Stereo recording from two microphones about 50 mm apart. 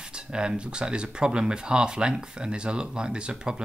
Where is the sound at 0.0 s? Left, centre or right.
Centre.